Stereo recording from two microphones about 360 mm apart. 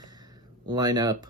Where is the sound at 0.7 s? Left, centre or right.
Centre.